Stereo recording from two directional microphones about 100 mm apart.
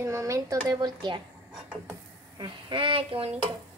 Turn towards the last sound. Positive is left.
turn(degrees=-65)  # may be behind; listen again after turning